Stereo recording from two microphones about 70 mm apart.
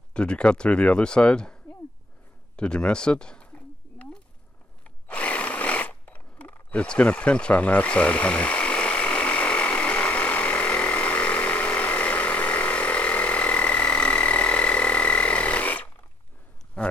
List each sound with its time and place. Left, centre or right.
0.1 s speech: centre
2.5 s a sound: centre
6.7 s tools: centre